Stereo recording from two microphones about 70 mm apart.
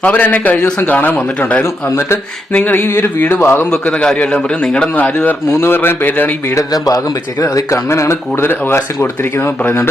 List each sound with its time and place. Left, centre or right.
0.0 s speech: left
2.0 s speech: left
3.7 s a man's voice: centre
5.5 s speech: left
6.6 s speech: left
7.9 s speech: left